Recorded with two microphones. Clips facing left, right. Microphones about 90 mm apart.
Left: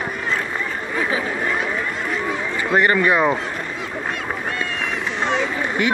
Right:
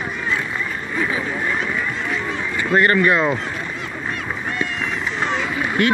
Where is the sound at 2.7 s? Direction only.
15° left (ahead or behind).